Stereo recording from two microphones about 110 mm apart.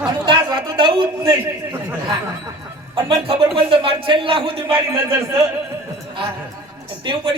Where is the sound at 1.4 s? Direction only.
20° right (ahead or behind).